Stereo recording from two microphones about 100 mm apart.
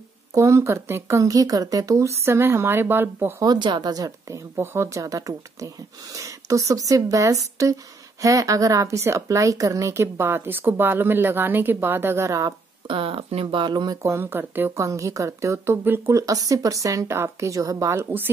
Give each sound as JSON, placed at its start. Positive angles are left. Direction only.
{"t": 0.3, "sound": "a woman's voice", "side_deg": -30}
{"t": 3.4, "sound": "speech", "side_deg": -50}
{"t": 4.6, "sound": "speech", "side_deg": -30}
{"t": 12.8, "sound": "speech", "side_deg": -65}
{"t": 14.0, "sound": "a woman's voice", "side_deg": -25}
{"t": 14.9, "sound": "speech", "side_deg": -35}
{"t": 16.2, "sound": "speech", "side_deg": -35}